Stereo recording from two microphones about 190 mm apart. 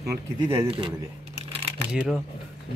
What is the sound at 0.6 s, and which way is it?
Speech, 30° right (ahead or behind).